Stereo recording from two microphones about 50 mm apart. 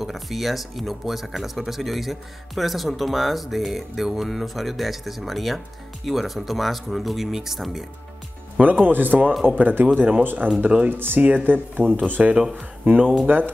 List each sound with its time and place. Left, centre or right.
0.0 s speech: centre
8.6 s speech: right
11.2 s speech: right
13.3 s speech: right